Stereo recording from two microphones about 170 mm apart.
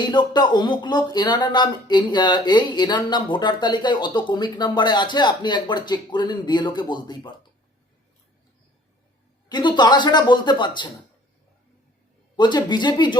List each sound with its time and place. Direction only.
0.0 s speech: 25° left (ahead or behind)
9.5 s speech: 25° left (ahead or behind)
12.4 s speech: 25° left (ahead or behind)